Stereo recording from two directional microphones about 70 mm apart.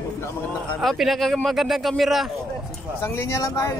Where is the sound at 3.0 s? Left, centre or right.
Left.